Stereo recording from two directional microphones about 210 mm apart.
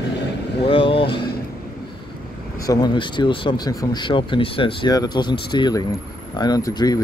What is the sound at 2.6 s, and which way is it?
Speech, 20° left (ahead or behind).